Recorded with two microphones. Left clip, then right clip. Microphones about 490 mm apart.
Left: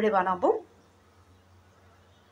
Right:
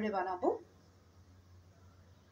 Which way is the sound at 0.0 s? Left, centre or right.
Right.